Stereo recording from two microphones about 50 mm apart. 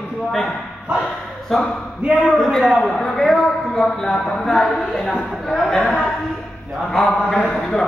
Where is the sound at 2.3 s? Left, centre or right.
Centre.